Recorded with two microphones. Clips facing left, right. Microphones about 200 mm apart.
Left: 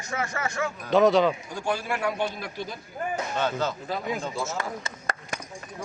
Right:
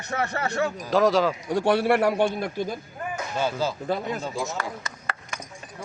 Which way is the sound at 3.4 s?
10° right (ahead or behind).